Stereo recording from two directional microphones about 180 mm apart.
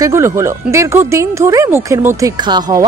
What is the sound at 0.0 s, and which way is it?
Speech, 15° right (ahead or behind).